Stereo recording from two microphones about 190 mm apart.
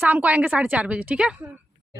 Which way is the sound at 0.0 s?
10° right (ahead or behind).